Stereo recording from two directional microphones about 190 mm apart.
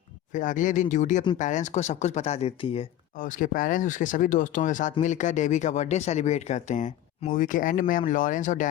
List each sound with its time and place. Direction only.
0.3 s speech: 45° left (ahead or behind)
3.2 s speech: 45° left (ahead or behind)